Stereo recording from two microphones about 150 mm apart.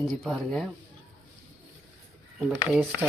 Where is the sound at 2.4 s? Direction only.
10° right (ahead or behind).